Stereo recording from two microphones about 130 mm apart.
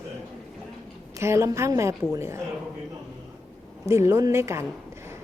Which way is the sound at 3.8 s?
20° right (ahead or behind).